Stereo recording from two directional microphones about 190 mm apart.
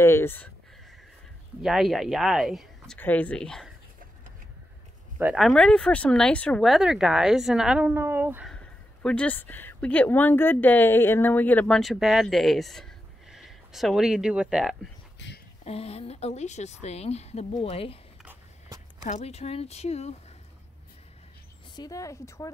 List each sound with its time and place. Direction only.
0.0 s a woman's voice: 15° left (ahead or behind)
1.6 s a woman's voice: centre (ahead or behind)
5.2 s a woman's voice: centre (ahead or behind)
9.0 s a woman's voice: 5° left (ahead or behind)
15.1 s a sound: 65° left (ahead or behind)
15.6 s a woman's voice: 35° left (ahead or behind)
18.2 s a sound: 15° right (ahead or behind)
19.0 s a woman's voice: 35° left (ahead or behind)
21.7 s a woman's voice: 20° left (ahead or behind)